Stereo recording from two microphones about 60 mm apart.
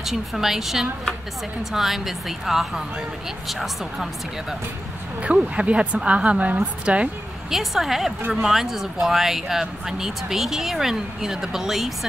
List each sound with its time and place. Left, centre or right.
0.0 s speech: centre
5.2 s a woman's voice: right
7.5 s speech: centre